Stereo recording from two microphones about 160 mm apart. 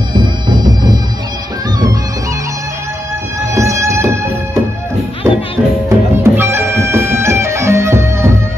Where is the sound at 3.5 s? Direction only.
15° right (ahead or behind).